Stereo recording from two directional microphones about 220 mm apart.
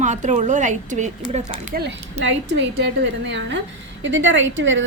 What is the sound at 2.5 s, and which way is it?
A woman's voice, 50° right (ahead or behind).